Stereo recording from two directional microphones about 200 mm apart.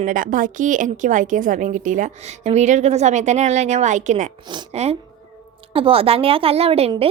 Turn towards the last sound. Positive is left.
turn(degrees=-30)  # may be behind; listen again after turning